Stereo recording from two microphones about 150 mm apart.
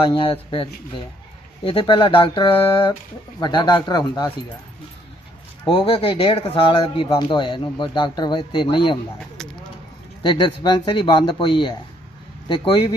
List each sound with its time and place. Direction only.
0.1 s speech: 35° left (ahead or behind)
5.6 s speech: 35° left (ahead or behind)
9.4 s a sound: 5° left (ahead or behind)
10.2 s speech: 30° left (ahead or behind)